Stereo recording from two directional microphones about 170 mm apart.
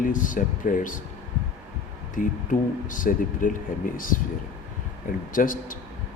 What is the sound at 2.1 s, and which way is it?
Speech, 50° left (ahead or behind).